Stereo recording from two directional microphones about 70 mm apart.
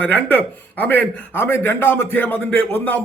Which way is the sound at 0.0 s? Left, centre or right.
Left.